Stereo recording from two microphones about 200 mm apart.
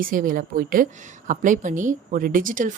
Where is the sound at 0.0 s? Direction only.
45° right (ahead or behind).